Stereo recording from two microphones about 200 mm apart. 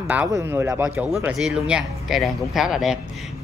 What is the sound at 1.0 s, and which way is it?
Speech, centre (ahead or behind).